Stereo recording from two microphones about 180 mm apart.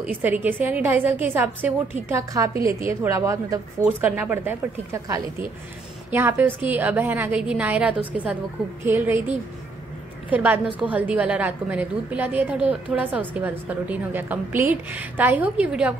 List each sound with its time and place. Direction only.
0.0 s a woman's voice: 10° right (ahead or behind)
10.3 s a woman's voice: 10° right (ahead or behind)